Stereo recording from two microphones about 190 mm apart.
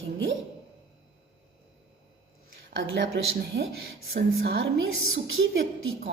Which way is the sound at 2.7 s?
85° right.